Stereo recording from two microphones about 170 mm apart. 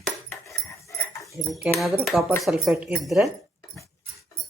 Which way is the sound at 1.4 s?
Centre (ahead or behind).